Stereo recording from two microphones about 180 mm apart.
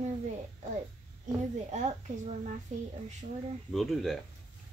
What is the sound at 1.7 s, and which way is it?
Speech, 40° right (ahead or behind).